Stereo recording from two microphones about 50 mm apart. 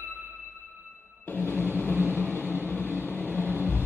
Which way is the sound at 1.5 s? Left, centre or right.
Right.